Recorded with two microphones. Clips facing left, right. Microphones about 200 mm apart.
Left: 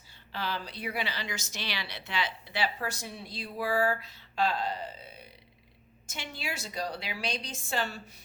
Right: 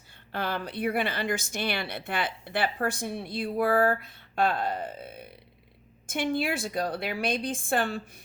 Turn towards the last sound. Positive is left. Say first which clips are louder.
# right 6 dB
turn(degrees=-55)  # may be behind; listen again after turning